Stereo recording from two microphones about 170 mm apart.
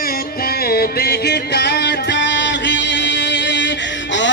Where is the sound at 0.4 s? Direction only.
65° left (ahead or behind).